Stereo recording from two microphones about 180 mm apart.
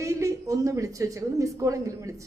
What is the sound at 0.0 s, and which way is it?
A woman's voice, 15° right (ahead or behind).